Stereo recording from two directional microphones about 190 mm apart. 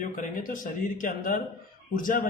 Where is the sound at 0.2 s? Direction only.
45° left (ahead or behind).